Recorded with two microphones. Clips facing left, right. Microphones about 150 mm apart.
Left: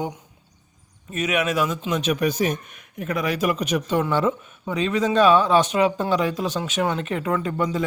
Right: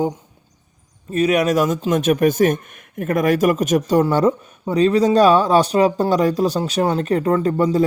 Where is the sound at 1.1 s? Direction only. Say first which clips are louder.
Right 7 dB; 35° right (ahead or behind).